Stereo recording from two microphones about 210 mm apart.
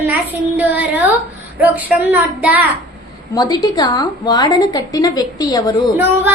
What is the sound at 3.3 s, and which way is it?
A woman's voice, 20° left (ahead or behind).